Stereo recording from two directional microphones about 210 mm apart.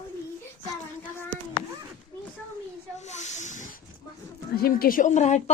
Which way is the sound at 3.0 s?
35° left (ahead or behind).